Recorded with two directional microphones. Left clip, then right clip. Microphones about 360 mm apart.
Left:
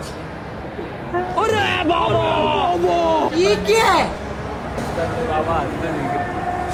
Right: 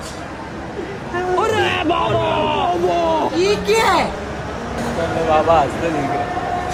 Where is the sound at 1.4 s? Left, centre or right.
Centre.